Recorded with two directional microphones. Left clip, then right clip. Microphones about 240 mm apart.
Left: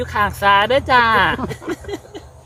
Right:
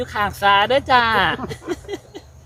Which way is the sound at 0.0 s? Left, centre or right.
Centre.